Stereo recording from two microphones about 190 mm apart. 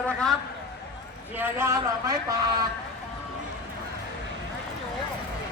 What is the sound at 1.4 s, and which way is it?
Speech, 15° right (ahead or behind).